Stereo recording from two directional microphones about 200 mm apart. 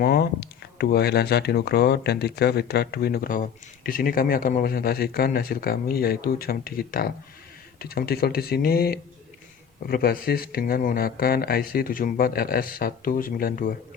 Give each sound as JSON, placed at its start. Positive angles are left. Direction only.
{"t": 0.0, "sound": "speech", "side_deg": 50}